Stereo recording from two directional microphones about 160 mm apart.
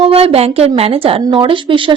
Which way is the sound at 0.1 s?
40° right (ahead or behind).